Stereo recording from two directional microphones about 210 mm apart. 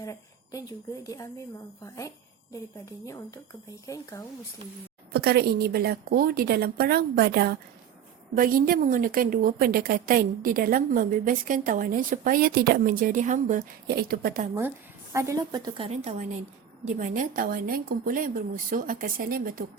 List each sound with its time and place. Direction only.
0.0 s a sound: 15° left (ahead or behind)
1.0 s a woman's voice: 15° left (ahead or behind)
5.1 s a woman's voice: 50° right (ahead or behind)
15.1 s a woman's voice: 15° right (ahead or behind)
16.0 s a woman's voice: 35° right (ahead or behind)